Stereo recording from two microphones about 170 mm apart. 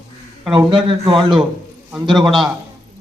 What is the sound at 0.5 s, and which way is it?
Speech, 30° right (ahead or behind).